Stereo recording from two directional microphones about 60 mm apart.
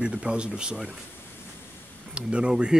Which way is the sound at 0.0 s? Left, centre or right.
Centre.